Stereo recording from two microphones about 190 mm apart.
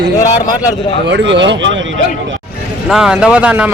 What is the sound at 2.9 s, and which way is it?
Speech, 5° right (ahead or behind).